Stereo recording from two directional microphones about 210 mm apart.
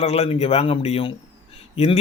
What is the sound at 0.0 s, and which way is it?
A man's voice, 30° left (ahead or behind).